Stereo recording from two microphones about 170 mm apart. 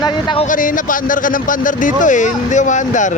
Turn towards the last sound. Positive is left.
turn(degrees=45)  # may be behind; listen again after turning